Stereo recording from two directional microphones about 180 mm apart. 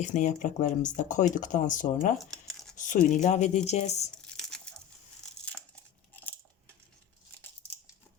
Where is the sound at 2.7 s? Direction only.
45° left (ahead or behind).